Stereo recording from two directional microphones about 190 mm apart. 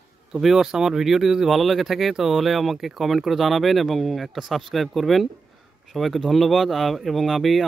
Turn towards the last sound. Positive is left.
turn(degrees=0)  # may be behind; listen again after turning